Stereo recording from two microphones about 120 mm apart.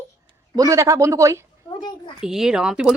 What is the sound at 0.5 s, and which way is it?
Speech, 25° right (ahead or behind).